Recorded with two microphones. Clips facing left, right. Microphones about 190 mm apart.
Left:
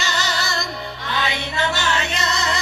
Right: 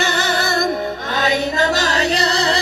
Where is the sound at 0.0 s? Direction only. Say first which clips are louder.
Right 6 dB; 55° right (ahead or behind).